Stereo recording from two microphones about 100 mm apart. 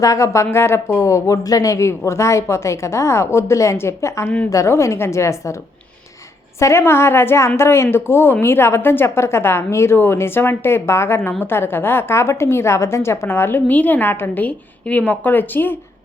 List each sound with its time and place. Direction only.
0.0 s a woman's voice: 30° left (ahead or behind)
6.6 s a woman's voice: 25° left (ahead or behind)